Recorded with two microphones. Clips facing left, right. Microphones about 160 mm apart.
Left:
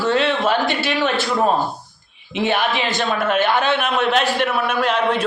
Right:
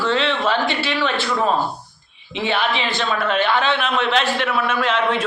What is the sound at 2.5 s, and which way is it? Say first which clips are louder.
Speech: left 1 dB; 10° left (ahead or behind).